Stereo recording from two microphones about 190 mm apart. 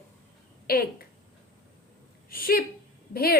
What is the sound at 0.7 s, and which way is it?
Speech, 50° left (ahead or behind).